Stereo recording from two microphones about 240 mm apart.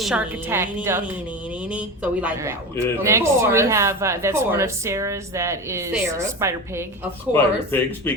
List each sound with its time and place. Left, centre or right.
0.0 s speech: centre
7.3 s speech: centre